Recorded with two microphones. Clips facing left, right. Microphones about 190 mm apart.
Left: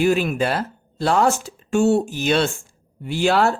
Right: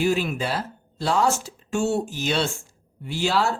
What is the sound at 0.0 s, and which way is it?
Speech, 60° left (ahead or behind).